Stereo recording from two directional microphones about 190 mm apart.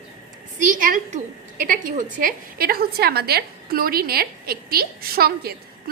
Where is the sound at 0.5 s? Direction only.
45° right (ahead or behind).